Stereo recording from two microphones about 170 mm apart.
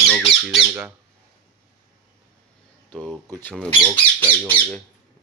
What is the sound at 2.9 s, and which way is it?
Speech, 5° left (ahead or behind).